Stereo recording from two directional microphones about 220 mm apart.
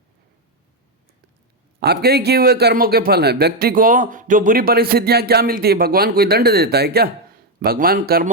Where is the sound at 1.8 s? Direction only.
45° right (ahead or behind).